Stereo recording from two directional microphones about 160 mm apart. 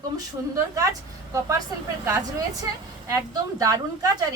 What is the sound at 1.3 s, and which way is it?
Speech, 20° right (ahead or behind).